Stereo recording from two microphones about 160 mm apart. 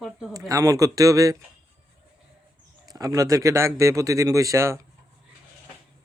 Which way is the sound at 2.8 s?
20° right (ahead or behind).